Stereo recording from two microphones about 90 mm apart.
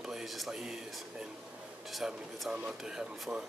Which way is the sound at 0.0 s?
5° right (ahead or behind).